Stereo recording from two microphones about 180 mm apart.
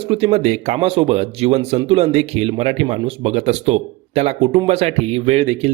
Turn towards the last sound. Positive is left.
turn(degrees=-35)  # may be behind; listen again after turning